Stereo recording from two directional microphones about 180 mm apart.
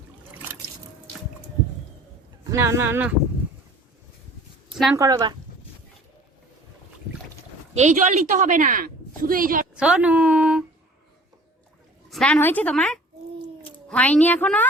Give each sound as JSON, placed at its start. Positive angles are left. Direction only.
{"t": 2.5, "sound": "speech", "side_deg": -15}
{"t": 4.7, "sound": "a sound", "side_deg": -5}
{"t": 4.9, "sound": "speech", "side_deg": -20}
{"t": 7.7, "sound": "a woman's voice", "side_deg": -40}
{"t": 9.7, "sound": "a woman's voice", "side_deg": -5}
{"t": 12.1, "sound": "a woman's voice", "side_deg": 5}